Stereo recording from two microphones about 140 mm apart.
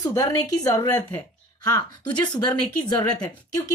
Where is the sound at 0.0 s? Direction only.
25° left (ahead or behind).